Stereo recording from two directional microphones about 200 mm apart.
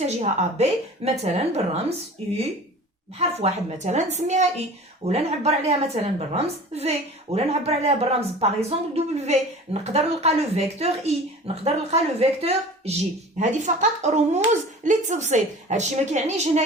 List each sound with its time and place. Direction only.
0.0 s a woman's voice: 35° right (ahead or behind)
3.2 s a woman's voice: 30° right (ahead or behind)